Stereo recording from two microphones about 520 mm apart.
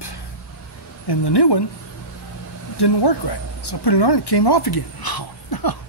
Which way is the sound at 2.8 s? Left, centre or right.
Left.